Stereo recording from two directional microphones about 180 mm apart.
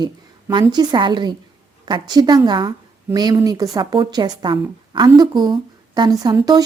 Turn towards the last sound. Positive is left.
turn(degrees=-20)  # may be behind; listen again after turning